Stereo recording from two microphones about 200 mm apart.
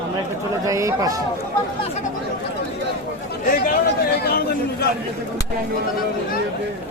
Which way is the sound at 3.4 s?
45° left (ahead or behind).